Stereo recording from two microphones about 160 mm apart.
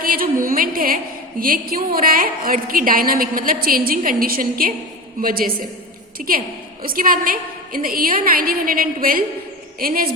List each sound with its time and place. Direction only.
0.0 s a woman's voice: 65° right (ahead or behind)